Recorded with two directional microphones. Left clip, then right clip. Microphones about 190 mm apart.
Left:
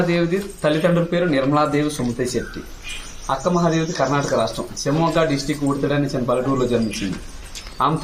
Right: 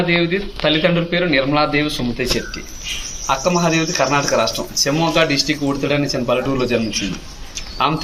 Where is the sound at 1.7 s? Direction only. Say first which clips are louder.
Right 2 dB; 15° right (ahead or behind).